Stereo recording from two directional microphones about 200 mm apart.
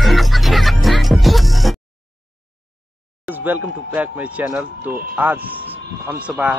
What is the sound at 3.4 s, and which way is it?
Speech, 10° right (ahead or behind).